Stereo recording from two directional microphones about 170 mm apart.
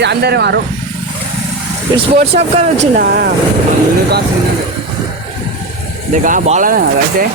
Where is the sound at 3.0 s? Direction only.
65° right (ahead or behind).